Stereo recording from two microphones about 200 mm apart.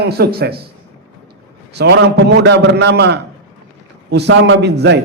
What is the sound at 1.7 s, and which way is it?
A man's voice, 60° right (ahead or behind).